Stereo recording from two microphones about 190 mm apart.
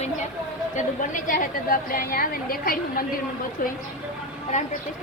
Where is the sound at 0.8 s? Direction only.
45° left (ahead or behind).